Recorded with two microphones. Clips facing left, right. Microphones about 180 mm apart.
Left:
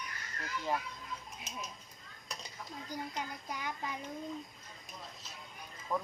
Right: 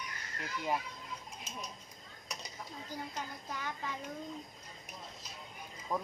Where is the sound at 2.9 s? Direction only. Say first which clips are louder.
Left 2 dB; 15° left (ahead or behind).